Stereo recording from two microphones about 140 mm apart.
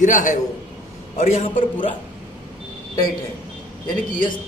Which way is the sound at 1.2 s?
50° left (ahead or behind).